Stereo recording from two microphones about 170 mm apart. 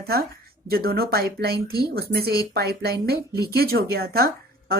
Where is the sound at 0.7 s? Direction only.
65° right (ahead or behind).